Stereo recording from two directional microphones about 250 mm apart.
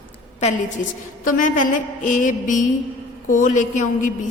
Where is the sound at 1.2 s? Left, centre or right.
Left.